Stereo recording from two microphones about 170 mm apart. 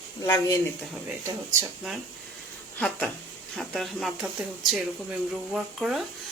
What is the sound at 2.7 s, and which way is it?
Speech, 5° left (ahead or behind).